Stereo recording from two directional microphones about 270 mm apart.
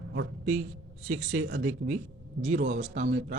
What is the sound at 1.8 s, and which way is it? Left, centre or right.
Speech, right.